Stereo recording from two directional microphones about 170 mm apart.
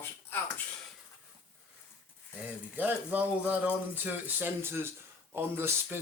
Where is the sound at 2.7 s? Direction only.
10° right (ahead or behind).